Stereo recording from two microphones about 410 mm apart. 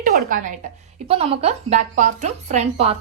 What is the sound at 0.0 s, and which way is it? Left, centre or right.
A woman's voice, centre.